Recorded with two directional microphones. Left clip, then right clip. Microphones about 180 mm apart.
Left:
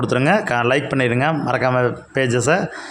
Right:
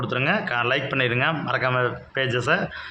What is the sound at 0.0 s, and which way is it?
A man's voice, 50° left (ahead or behind).